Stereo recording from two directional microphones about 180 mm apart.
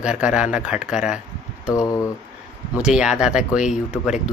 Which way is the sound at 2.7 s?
5° right (ahead or behind).